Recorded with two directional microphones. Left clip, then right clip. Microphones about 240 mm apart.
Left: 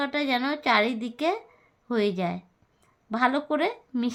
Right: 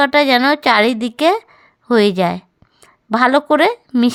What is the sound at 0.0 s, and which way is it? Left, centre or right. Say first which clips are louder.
A woman's voice: right 15 dB; right.